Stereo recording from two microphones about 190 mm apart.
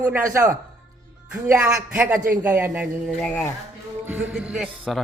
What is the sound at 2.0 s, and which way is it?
Speech, 5° right (ahead or behind).